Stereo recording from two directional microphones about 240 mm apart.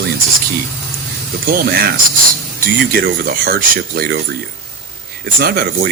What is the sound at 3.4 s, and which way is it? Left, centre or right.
Speech, right.